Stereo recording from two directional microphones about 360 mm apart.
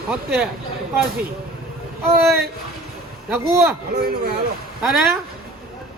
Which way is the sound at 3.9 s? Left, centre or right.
Right.